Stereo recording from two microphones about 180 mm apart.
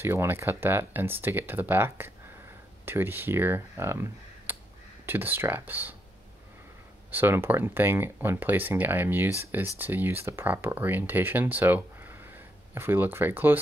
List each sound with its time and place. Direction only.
0.0 s speech: 15° right (ahead or behind)
7.1 s speech: 10° right (ahead or behind)